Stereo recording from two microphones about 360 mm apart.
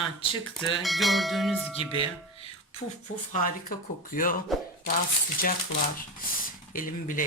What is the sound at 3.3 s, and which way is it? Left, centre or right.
Speech, left.